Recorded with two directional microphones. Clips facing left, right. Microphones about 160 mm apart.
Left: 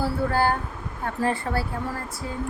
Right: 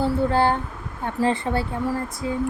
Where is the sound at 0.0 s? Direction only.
25° right (ahead or behind).